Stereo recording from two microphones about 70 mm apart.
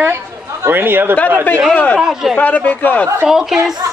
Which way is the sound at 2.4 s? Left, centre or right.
Left.